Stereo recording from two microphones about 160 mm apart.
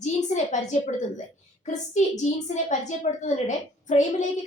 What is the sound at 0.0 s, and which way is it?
A woman's voice, 50° left (ahead or behind).